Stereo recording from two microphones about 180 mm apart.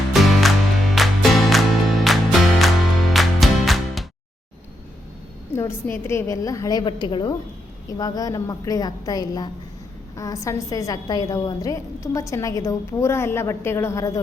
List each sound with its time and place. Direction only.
0.1 s music: centre (ahead or behind)
5.5 s a woman's voice: 15° left (ahead or behind)